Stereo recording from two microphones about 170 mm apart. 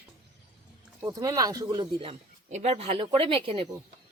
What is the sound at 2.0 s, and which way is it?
Speech, 35° right (ahead or behind).